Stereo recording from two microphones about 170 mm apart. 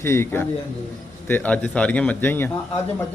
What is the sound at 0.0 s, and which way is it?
Speech, 15° left (ahead or behind).